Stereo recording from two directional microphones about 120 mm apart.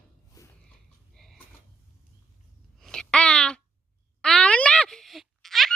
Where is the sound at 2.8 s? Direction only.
5° left (ahead or behind).